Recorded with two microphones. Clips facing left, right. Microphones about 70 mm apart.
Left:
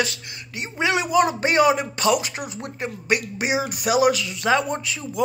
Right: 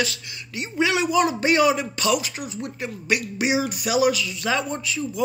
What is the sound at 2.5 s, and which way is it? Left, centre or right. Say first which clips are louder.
Speech: even; left.